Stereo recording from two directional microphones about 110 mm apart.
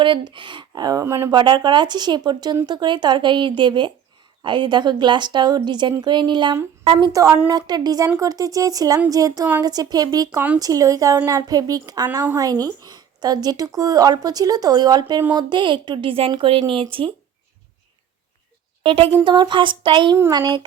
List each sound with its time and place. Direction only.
0.0 s a woman's voice: 50° right (ahead or behind); by 1.3 s 25° right (ahead or behind)
1.3 s a woman's voice: 45° right (ahead or behind)
7.1 s a woman's voice: 30° right (ahead or behind); by 16.8 s 55° right (ahead or behind)
18.8 s a woman's voice: 55° right (ahead or behind)
19.2 s a woman's voice: 45° right (ahead or behind)